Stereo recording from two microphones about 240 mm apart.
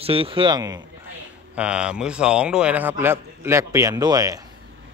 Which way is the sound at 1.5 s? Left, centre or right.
Centre.